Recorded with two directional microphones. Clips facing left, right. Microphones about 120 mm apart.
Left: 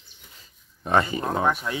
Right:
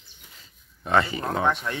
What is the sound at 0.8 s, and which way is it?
Speech, 20° left (ahead or behind).